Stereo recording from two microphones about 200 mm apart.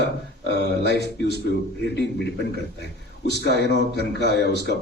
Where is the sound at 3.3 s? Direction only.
60° left (ahead or behind).